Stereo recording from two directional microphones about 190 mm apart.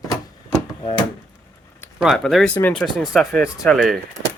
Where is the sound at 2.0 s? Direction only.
Centre (ahead or behind).